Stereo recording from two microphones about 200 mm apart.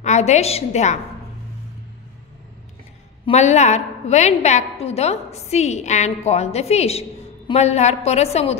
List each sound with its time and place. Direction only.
0.0 s a woman's voice: 35° left (ahead or behind)
3.3 s a woman's voice: 35° left (ahead or behind)